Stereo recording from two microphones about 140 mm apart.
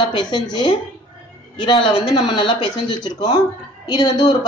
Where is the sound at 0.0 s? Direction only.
35° left (ahead or behind).